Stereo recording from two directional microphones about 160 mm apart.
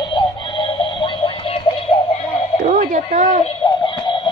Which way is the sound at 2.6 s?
60° right (ahead or behind).